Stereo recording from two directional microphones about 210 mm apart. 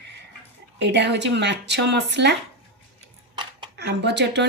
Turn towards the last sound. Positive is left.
turn(degrees=-55)  # may be behind; listen again after turning